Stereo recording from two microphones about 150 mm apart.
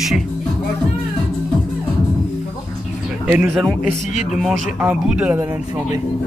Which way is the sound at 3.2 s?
15° right (ahead or behind).